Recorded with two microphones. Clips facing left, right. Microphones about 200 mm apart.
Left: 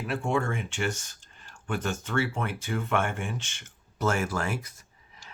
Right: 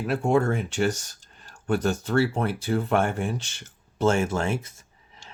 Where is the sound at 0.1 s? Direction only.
40° right (ahead or behind).